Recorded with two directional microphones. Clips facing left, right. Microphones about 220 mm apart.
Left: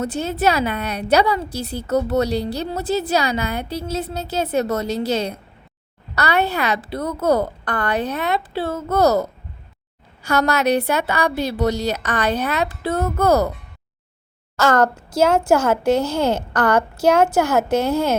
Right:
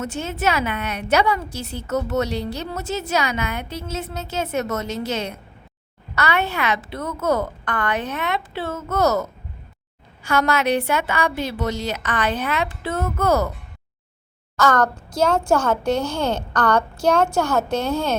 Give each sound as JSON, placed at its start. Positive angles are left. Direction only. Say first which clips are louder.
{"t": 0.0, "sound": "a woman's voice", "louder": "left 4 dB", "side_deg": 35}
{"t": 14.5, "sound": "a child's voice", "louder": "left 2 dB", "side_deg": 25}
{"t": 15.6, "sound": "a woman's voice", "louder": "left 3 dB", "side_deg": 5}
{"t": 16.0, "sound": "a child's voice", "louder": "left 3 dB", "side_deg": 20}
{"t": 16.5, "sound": "a woman's voice", "louder": "left 2 dB", "side_deg": 5}